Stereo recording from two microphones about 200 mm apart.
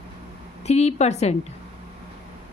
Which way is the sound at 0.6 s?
35° left (ahead or behind).